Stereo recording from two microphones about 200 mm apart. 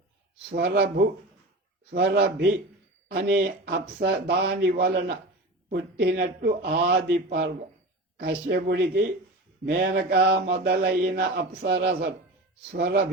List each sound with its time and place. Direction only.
0.5 s speech: 55° right (ahead or behind)
3.1 s mantra: 55° right (ahead or behind)
5.7 s speech: 55° right (ahead or behind)
9.6 s mantra: 50° right (ahead or behind)